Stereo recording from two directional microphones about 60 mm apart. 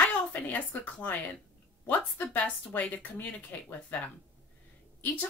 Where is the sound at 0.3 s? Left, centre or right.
Left.